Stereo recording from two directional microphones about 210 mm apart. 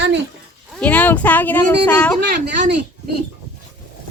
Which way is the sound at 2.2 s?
55° right (ahead or behind).